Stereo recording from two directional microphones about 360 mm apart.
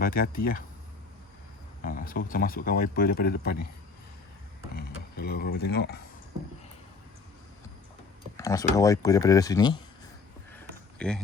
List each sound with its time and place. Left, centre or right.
0.0 s speech: left
1.8 s speech: left
4.7 s speech: left
8.4 s speech: centre
10.5 s a sound: centre